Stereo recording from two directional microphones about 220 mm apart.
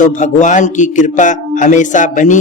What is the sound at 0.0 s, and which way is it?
A man's voice, 35° left (ahead or behind).